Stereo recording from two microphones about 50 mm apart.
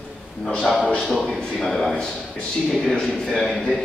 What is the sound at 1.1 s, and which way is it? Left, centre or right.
A man's voice, centre.